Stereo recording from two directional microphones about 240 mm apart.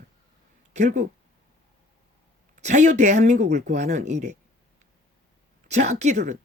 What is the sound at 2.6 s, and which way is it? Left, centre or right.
Speech, right.